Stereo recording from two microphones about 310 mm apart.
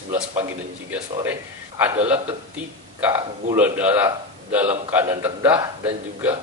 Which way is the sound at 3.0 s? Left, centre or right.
Centre.